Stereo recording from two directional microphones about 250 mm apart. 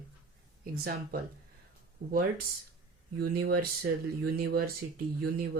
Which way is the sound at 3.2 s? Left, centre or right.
Right.